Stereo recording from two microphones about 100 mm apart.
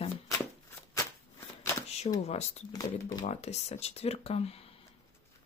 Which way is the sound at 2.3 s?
90° left.